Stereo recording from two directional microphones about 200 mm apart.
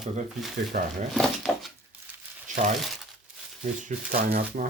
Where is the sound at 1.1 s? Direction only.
Centre (ahead or behind).